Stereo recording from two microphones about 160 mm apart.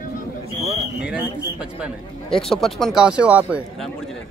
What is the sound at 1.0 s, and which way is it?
A man's voice, 5° right (ahead or behind).